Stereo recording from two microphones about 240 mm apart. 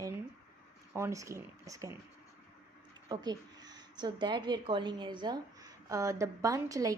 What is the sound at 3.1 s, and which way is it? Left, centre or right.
Speech, centre.